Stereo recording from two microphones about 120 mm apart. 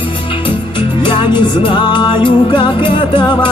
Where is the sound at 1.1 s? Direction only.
40° left (ahead or behind).